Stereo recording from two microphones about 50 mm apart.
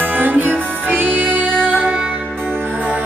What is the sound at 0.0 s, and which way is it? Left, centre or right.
Music, right.